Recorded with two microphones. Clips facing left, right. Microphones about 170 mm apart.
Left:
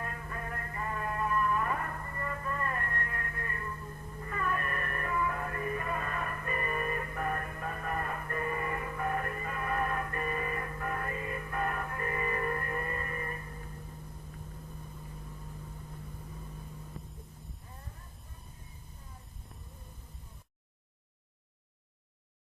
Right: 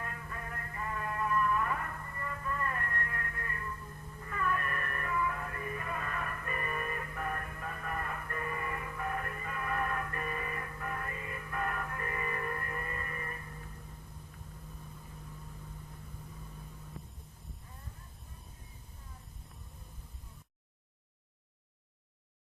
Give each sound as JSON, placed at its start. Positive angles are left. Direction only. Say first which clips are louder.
{"t": 0.0, "sound": "music", "louder": "left 3 dB", "side_deg": 40}